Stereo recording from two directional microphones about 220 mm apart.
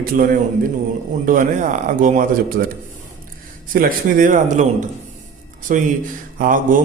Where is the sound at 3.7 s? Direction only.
40° right (ahead or behind).